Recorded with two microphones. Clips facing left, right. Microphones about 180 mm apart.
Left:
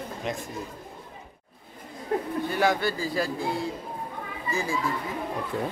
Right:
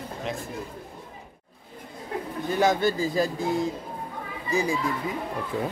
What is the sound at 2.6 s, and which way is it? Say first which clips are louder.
Speech: right 4 dB; 20° right (ahead or behind).